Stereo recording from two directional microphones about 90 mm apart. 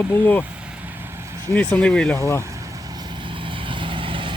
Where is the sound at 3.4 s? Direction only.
65° right (ahead or behind).